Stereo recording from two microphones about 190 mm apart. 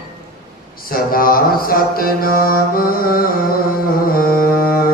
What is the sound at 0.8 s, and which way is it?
Mantra, 50° left (ahead or behind).